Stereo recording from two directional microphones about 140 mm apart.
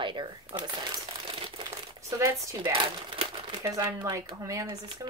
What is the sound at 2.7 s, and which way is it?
Crumpling, 40° right (ahead or behind).